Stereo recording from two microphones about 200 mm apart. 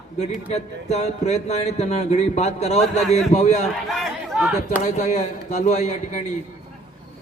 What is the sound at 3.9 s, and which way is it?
Speech, centre (ahead or behind).